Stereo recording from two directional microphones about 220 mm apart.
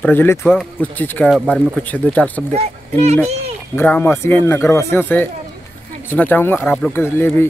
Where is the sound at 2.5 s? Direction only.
30° right (ahead or behind).